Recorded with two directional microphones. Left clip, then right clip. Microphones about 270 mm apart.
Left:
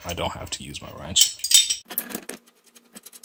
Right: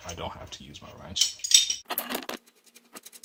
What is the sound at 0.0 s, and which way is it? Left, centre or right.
Speech, left.